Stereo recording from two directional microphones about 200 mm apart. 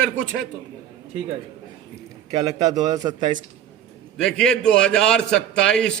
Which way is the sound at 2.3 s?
20° right (ahead or behind).